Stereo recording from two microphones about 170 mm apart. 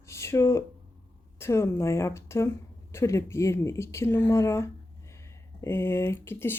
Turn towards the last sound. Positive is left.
turn(degrees=15)  # may be behind; listen again after turning